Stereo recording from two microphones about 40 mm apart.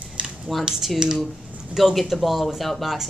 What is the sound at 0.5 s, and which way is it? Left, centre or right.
Speech, centre.